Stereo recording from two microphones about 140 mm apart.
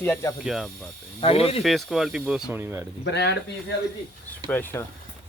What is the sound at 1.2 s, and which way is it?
Speech, 45° left (ahead or behind).